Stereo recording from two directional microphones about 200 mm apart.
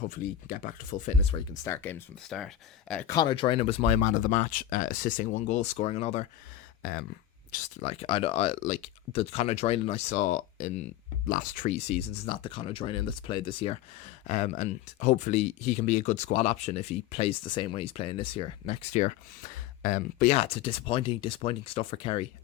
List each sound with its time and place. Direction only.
0.1 s speech: 45° left (ahead or behind)
1.6 s speech: 10° left (ahead or behind)
3.2 s speech: 25° left (ahead or behind)
7.8 s speech: 30° left (ahead or behind)